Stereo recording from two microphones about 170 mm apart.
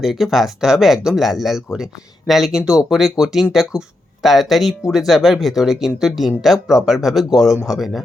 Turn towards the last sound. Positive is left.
turn(degrees=0)  # may be behind; listen again after turning